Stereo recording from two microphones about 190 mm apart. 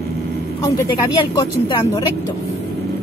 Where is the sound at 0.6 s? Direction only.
15° left (ahead or behind).